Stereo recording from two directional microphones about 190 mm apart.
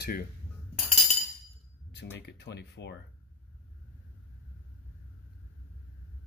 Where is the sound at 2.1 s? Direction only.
65° left (ahead or behind).